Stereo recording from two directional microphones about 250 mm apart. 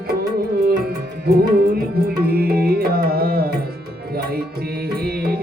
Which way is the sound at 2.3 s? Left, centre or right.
Right.